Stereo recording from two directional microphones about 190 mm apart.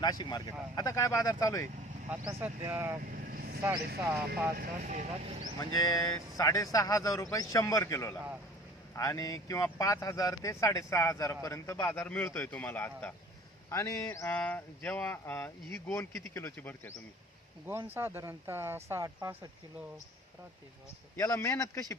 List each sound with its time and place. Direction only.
0.0 s speech: 20° left (ahead or behind)
2.0 s speech: 10° right (ahead or behind)
3.0 s vehicle: 50° right (ahead or behind)
4.5 s speech: 50° right (ahead or behind)
5.5 s speech: 20° left (ahead or behind)
17.7 s speech: 10° right (ahead or behind)
21.2 s speech: 15° left (ahead or behind)